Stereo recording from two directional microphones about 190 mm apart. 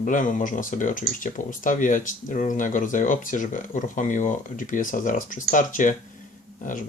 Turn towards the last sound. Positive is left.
turn(degrees=45)  # may be behind; listen again after turning